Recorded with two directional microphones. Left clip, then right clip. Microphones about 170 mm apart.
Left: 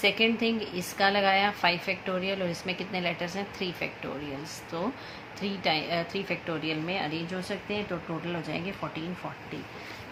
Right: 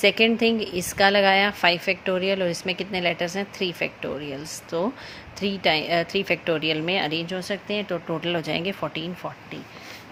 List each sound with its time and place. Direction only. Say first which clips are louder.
0.0 s speech: right 6 dB; 45° right (ahead or behind)